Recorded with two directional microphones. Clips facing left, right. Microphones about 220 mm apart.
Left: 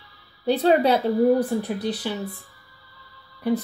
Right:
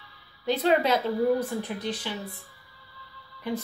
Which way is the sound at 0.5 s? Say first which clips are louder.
Left 5 dB; 35° left (ahead or behind).